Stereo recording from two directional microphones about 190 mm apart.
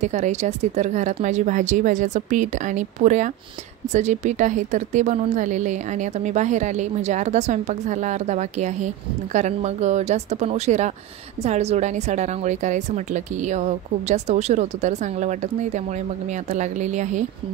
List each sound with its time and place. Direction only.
0.0 s a woman's voice: 40° right (ahead or behind)